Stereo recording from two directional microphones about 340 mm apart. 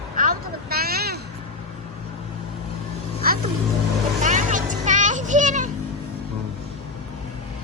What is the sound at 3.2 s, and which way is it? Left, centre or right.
Music, right.